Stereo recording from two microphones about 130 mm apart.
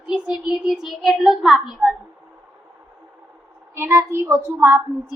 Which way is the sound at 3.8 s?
20° right (ahead or behind).